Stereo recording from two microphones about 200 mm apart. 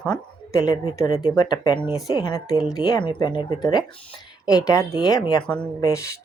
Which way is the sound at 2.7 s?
20° left (ahead or behind).